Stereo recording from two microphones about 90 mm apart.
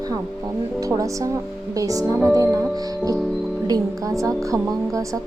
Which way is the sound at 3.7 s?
35° right (ahead or behind).